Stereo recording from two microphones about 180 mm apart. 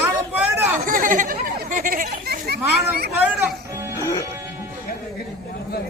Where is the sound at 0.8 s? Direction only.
50° right (ahead or behind).